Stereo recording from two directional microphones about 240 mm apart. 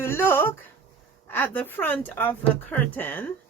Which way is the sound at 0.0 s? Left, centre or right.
Centre.